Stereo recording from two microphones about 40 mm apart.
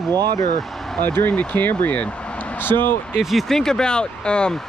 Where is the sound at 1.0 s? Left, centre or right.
Left.